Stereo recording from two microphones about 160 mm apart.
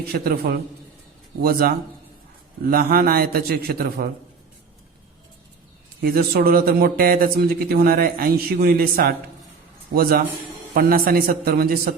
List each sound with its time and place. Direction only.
0.1 s a man's voice: 70° right (ahead or behind)
6.0 s a man's voice: 75° right (ahead or behind)